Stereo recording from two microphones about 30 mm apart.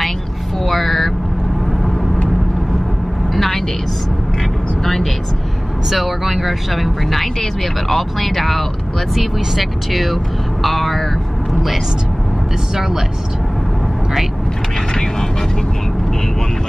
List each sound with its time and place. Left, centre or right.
0.7 s vehicle: centre
3.3 s vehicle: centre
5.9 s speech: centre
7.9 s speech: centre
12.7 s speech: centre